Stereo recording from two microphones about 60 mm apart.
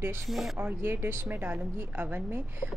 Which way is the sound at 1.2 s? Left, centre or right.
Right.